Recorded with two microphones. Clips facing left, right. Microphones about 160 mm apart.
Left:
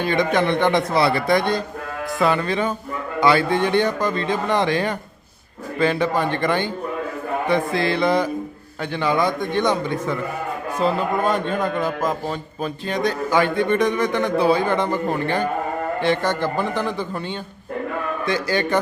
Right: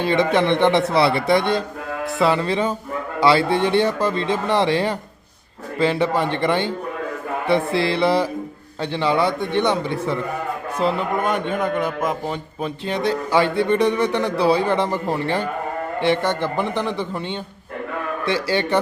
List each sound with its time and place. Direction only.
0.0 s a man's voice: 25° right (ahead or behind)